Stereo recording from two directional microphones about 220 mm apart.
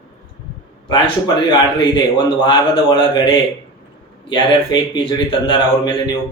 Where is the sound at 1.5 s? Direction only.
20° left (ahead or behind).